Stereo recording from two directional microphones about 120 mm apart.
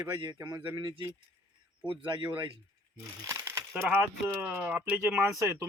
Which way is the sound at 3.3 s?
25° right (ahead or behind).